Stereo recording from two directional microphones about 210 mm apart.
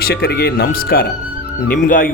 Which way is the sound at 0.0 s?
50° left (ahead or behind).